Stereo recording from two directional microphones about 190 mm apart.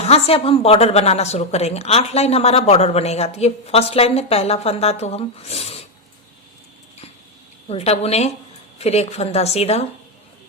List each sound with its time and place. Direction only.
0.0 s a woman's voice: 30° left (ahead or behind)
7.7 s a woman's voice: 30° left (ahead or behind)